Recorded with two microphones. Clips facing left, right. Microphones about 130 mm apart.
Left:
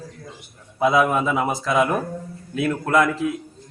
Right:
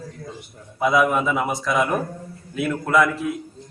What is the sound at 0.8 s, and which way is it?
A man's voice, 30° left (ahead or behind).